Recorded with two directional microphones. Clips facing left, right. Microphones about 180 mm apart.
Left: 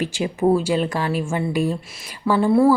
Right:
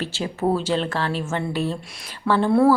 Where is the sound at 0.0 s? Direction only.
15° left (ahead or behind).